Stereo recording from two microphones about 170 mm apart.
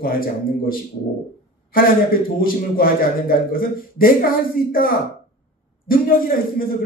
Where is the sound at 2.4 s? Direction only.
55° left (ahead or behind).